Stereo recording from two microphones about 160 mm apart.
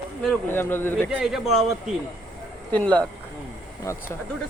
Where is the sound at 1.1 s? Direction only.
5° right (ahead or behind).